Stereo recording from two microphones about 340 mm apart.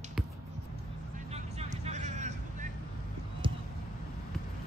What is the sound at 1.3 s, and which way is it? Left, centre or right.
Vehicle, centre.